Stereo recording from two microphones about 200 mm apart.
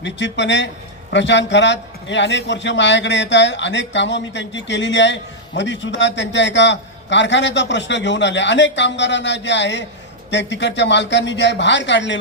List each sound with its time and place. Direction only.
0.0 s a man's voice: 65° left (ahead or behind)